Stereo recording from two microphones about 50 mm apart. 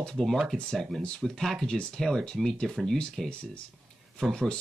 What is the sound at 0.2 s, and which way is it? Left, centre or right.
Speech, centre.